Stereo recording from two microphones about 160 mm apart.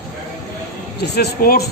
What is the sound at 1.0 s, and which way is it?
Speech, 90° left.